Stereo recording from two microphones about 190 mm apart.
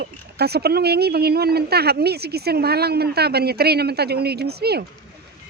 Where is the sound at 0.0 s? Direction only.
55° right (ahead or behind).